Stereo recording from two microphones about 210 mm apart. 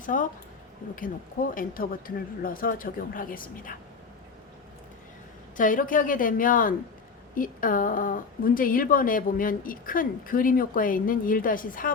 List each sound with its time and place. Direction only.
0.0 s a woman's voice: 40° left (ahead or behind)
5.5 s a woman's voice: 40° left (ahead or behind)